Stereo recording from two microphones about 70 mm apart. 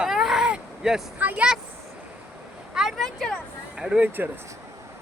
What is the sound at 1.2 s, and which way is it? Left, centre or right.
Speech, right.